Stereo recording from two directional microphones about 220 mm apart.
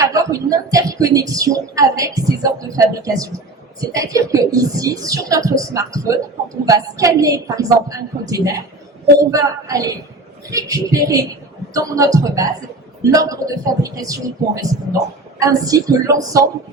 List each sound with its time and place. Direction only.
0.0 s speech: 15° right (ahead or behind)